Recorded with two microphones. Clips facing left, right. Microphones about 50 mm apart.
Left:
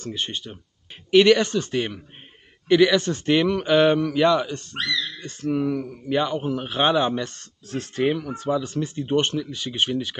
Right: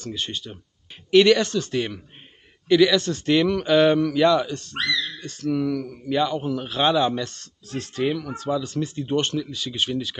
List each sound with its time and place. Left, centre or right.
0.0 s a man's voice: centre